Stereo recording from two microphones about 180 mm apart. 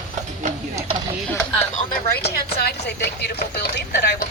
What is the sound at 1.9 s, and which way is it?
Speech, 60° left (ahead or behind).